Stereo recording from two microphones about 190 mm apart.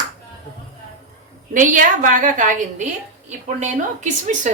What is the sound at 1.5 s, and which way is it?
A woman's voice, 45° right (ahead or behind).